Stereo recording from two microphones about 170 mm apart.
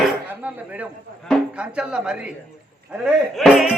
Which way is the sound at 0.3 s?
10° right (ahead or behind).